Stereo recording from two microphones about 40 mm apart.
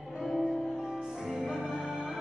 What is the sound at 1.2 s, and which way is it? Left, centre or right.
Music, centre.